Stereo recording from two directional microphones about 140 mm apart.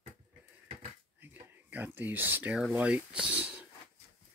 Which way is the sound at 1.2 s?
15° right (ahead or behind).